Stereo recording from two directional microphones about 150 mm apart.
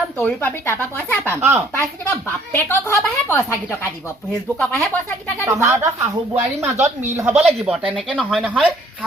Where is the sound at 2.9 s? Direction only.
20° left (ahead or behind).